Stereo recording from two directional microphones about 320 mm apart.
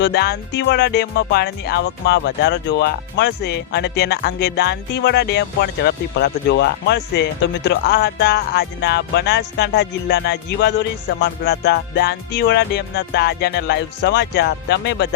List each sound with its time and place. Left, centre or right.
0.0 s music: left